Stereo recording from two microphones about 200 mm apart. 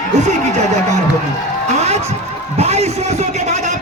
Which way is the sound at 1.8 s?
35° right (ahead or behind).